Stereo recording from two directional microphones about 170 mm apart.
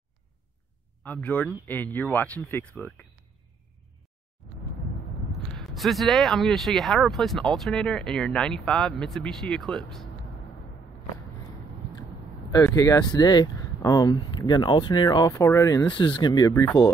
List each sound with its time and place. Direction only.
1.0 s speech: 10° left (ahead or behind)
5.6 s speech: centre (ahead or behind)
12.5 s speech: 20° left (ahead or behind)
15.9 s speech: 30° left (ahead or behind)